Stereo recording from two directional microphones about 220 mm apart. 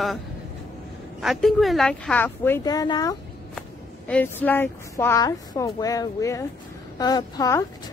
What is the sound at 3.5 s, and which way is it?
Speech, 5° left (ahead or behind).